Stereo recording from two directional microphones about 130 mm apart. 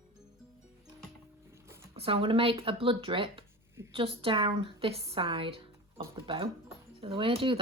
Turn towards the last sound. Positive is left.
turn(degrees=-45)  # may be behind; listen again after turning